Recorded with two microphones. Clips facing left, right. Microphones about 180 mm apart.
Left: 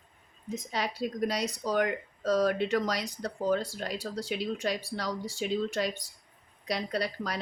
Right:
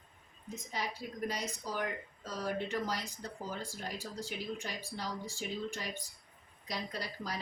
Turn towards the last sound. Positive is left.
turn(degrees=70)  # may be behind; listen again after turning